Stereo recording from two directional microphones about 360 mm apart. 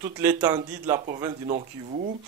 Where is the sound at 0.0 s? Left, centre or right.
Centre.